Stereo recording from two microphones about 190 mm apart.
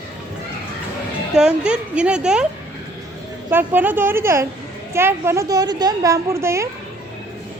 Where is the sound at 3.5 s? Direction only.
10° right (ahead or behind).